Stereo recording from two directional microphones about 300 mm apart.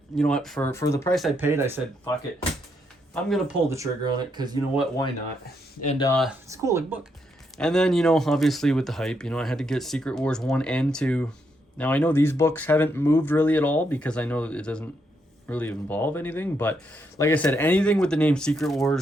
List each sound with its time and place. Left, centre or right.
0.2 s speech: centre
3.2 s speech: centre
5.8 s speech: left
6.1 s speech: centre
6.5 s speech: centre
7.6 s speech: centre